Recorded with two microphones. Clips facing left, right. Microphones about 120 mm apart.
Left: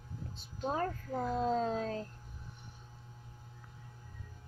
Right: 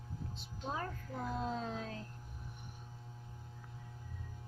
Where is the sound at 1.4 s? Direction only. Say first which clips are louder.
Left 7 dB; 40° left (ahead or behind).